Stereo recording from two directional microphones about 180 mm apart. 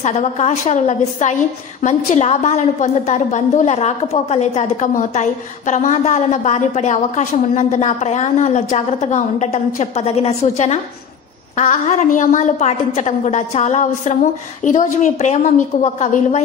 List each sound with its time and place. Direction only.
0.0 s a woman's voice: 40° left (ahead or behind)